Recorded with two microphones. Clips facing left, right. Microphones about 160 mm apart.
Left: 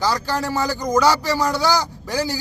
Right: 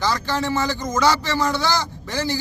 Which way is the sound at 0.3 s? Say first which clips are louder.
Even; 10° left (ahead or behind).